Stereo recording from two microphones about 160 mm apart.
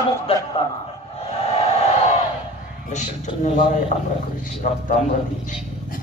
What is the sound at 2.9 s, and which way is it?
A man's voice, 50° left (ahead or behind).